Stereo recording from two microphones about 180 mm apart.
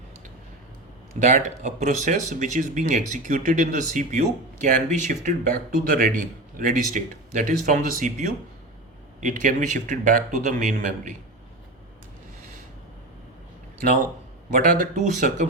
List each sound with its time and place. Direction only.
1.2 s speech: 40° right (ahead or behind)
14.5 s speech: 50° right (ahead or behind)